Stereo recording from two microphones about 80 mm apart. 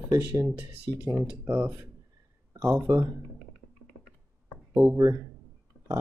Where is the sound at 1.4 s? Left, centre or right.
Right.